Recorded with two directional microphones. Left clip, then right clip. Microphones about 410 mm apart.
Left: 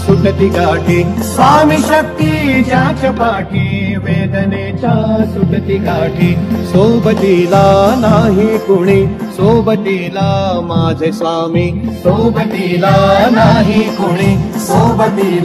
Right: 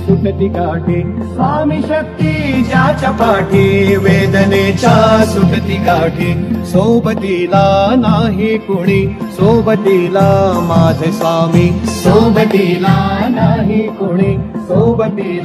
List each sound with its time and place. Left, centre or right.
7.5 s music: right
8.8 s music: centre